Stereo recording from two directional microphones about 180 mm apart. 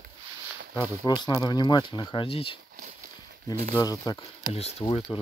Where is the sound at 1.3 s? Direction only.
25° left (ahead or behind).